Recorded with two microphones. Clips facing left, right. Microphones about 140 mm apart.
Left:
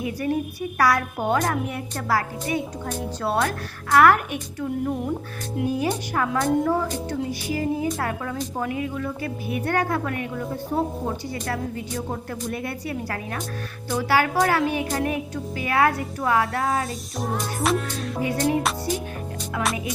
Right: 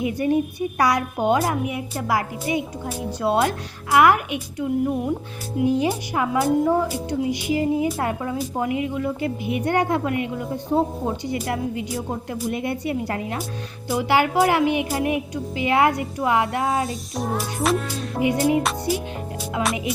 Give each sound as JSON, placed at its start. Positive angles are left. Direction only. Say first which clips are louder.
{"t": 0.0, "sound": "a woman's voice", "louder": "right 4 dB", "side_deg": -20}
{"t": 5.6, "sound": "music", "louder": "right 5 dB", "side_deg": -5}
{"t": 5.9, "sound": "a child's voice", "louder": "right 1 dB", "side_deg": -10}
{"t": 17.2, "sound": "music", "louder": "right 2 dB", "side_deg": 0}
{"t": 18.2, "sound": "a child's voice", "louder": "right 3 dB", "side_deg": -15}